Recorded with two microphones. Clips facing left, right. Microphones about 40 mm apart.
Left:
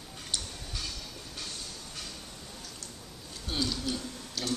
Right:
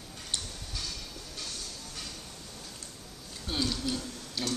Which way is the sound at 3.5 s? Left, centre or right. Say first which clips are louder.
Right 1 dB; centre.